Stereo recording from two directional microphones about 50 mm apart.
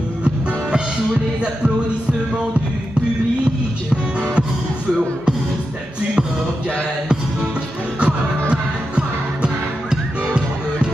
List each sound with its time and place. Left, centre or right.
0.2 s music: centre
3.9 s speech: right
8.0 s music: right